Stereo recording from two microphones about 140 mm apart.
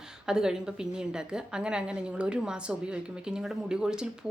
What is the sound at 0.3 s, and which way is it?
A woman's voice, 5° right (ahead or behind).